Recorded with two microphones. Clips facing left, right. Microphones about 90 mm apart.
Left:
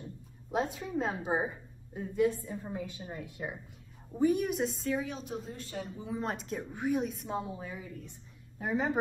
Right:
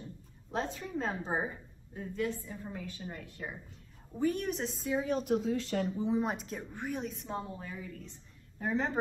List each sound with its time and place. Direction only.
0.5 s a woman's voice: 10° left (ahead or behind)
5.2 s speech: 85° right
5.9 s speech: 25° right (ahead or behind)
6.2 s a woman's voice: centre (ahead or behind)